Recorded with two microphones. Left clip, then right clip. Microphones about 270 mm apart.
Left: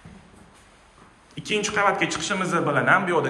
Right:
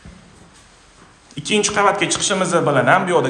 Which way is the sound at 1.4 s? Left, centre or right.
Centre.